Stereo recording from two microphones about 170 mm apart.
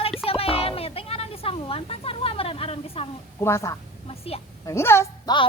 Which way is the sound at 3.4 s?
15° left (ahead or behind).